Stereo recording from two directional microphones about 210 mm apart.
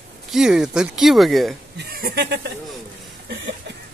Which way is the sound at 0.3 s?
5° right (ahead or behind).